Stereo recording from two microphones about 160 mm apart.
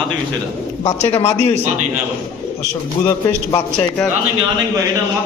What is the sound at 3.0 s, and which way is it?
Speech, 20° left (ahead or behind).